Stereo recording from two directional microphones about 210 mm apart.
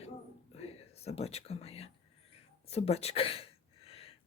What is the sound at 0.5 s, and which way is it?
Speech, 30° left (ahead or behind).